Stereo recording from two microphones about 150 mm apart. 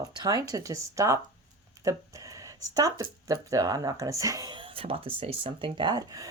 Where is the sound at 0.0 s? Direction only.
25° right (ahead or behind).